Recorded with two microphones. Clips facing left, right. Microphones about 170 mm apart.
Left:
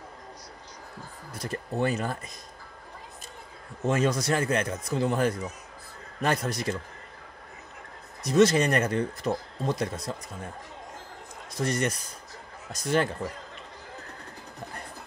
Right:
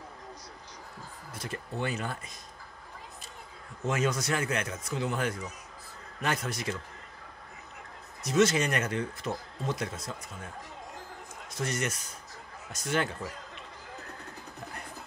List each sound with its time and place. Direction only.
1.4 s speech: 40° left (ahead or behind)
3.8 s speech: 35° left (ahead or behind)
8.2 s speech: 35° left (ahead or behind)
11.5 s speech: 35° left (ahead or behind)